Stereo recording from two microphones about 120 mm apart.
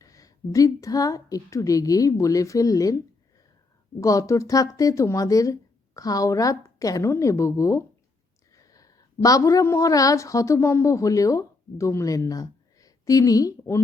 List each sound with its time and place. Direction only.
0.0 s speech: 30° left (ahead or behind)
4.0 s a woman's voice: 30° left (ahead or behind)